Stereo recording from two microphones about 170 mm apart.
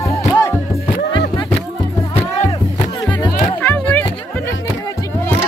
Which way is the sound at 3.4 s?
15° left (ahead or behind).